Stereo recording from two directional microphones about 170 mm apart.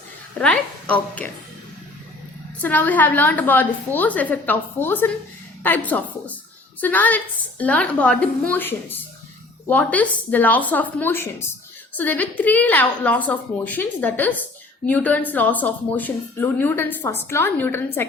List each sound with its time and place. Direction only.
0.3 s a woman's voice: 5° left (ahead or behind)
2.6 s a woman's voice: 10° left (ahead or behind)